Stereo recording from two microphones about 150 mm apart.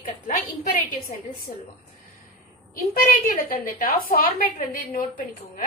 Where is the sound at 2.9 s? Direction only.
70° left (ahead or behind).